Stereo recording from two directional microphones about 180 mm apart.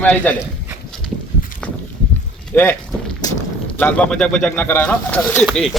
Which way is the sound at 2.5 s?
10° left (ahead or behind).